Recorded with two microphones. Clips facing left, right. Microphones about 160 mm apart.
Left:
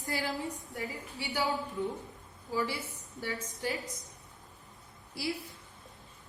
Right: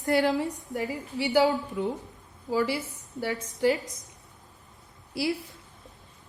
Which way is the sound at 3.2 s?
80° right.